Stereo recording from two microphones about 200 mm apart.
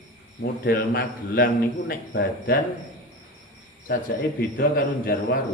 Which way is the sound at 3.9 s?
45° left (ahead or behind).